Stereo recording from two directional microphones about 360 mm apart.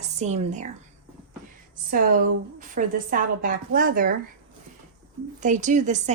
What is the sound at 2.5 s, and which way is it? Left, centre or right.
A woman's voice, right.